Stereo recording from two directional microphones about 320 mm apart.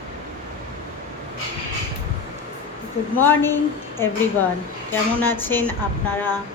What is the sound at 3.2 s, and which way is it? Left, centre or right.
A woman's voice, centre.